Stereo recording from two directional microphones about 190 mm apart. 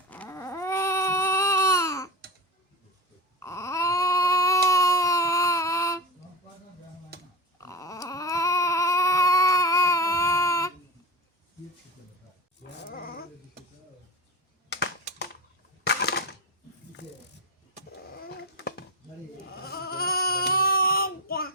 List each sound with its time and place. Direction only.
0.1 s baby cry: 10° left (ahead or behind)
3.4 s baby cry: 15° left (ahead or behind)
7.6 s a sound: 15° left (ahead or behind)
12.9 s dog: 50° left (ahead or behind)
15.8 s crushing: 60° left (ahead or behind)
18.1 s dog: 55° left (ahead or behind)
19.5 s a sound: 55° left (ahead or behind)